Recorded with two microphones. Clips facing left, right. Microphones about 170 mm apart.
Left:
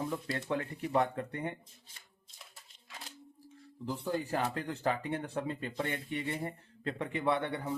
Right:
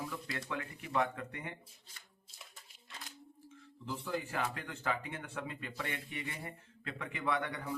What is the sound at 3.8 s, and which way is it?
Speech, 35° left (ahead or behind).